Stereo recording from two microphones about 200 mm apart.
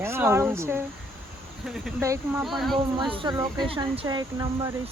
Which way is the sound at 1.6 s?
Centre (ahead or behind).